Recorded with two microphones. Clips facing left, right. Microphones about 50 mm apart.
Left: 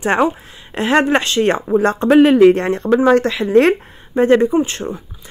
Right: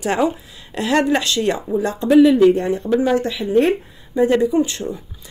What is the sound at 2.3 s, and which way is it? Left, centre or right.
Speech, left.